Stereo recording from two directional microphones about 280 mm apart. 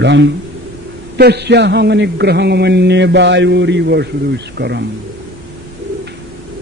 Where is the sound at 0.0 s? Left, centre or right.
Right.